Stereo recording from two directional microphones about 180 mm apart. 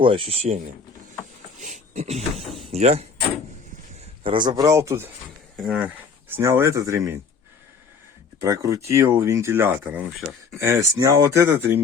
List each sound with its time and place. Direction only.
0.0 s speech: 30° right (ahead or behind)
1.5 s a sound: 45° right (ahead or behind)
2.4 s speech: centre (ahead or behind)
2.7 s speech: 35° right (ahead or behind)
4.2 s speech: 25° right (ahead or behind)
5.5 s speech: centre (ahead or behind)
8.4 s speech: 15° right (ahead or behind)